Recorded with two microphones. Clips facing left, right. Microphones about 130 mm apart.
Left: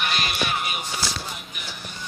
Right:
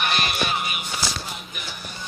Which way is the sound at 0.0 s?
50° right (ahead or behind).